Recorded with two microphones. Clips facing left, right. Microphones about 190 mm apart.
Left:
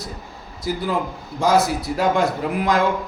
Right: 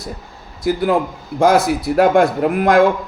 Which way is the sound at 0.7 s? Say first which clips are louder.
Right 7 dB; 60° right (ahead or behind).